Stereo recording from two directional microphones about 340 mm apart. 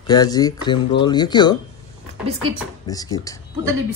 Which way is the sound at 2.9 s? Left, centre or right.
Centre.